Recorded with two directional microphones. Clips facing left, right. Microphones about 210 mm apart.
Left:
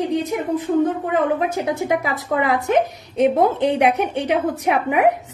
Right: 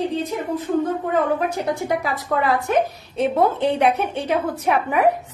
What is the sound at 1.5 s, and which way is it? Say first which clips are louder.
A woman's voice: left 2 dB; 20° left (ahead or behind).